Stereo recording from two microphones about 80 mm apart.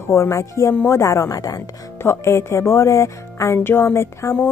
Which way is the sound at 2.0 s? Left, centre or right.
Left.